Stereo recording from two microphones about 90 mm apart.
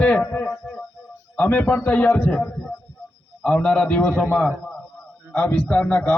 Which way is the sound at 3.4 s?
10° left (ahead or behind).